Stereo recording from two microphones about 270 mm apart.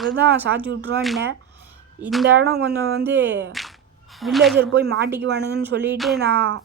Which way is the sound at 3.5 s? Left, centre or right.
Centre.